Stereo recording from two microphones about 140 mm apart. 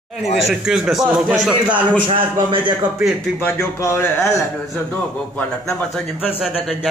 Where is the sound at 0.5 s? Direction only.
5° right (ahead or behind).